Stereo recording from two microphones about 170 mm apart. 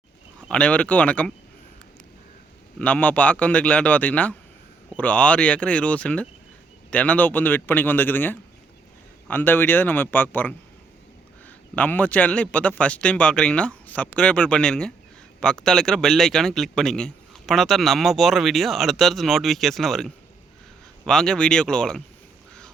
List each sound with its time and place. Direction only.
0.4 s a man's voice: 5° left (ahead or behind)
2.7 s a man's voice: 5° left (ahead or behind)